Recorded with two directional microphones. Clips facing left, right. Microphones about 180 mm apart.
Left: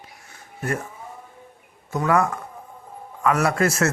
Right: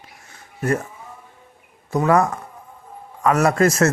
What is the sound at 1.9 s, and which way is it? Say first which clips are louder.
A man's voice: right 3 dB; 40° right (ahead or behind).